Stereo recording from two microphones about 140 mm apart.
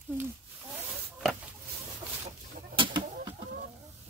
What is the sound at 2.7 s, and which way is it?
Chicken, 35° right (ahead or behind).